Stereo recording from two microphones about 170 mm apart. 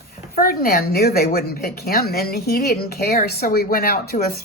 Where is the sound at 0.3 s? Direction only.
60° left (ahead or behind).